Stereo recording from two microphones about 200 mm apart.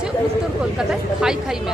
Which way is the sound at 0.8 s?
Centre (ahead or behind).